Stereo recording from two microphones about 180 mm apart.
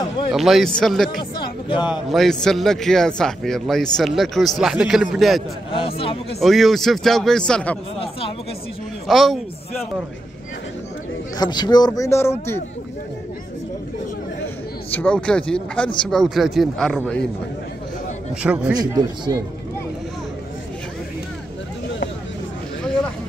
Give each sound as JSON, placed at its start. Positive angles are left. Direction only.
{"t": 0.3, "sound": "a man's voice", "side_deg": 0}
{"t": 1.7, "sound": "a man's voice", "side_deg": 25}
{"t": 2.0, "sound": "a man's voice", "side_deg": 0}
{"t": 5.7, "sound": "speech", "side_deg": 30}
{"t": 6.4, "sound": "a man's voice", "side_deg": 0}
{"t": 9.0, "sound": "a man's voice", "side_deg": 0}
{"t": 11.3, "sound": "a man's voice", "side_deg": 25}
{"t": 14.9, "sound": "a man's voice", "side_deg": 10}
{"t": 18.4, "sound": "a man's voice", "side_deg": -5}
{"t": 18.8, "sound": "a man's voice", "side_deg": -20}